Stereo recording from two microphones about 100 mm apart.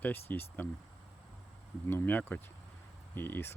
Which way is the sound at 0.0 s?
20° left (ahead or behind).